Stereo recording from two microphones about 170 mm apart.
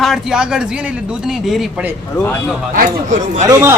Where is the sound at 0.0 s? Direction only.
Centre (ahead or behind).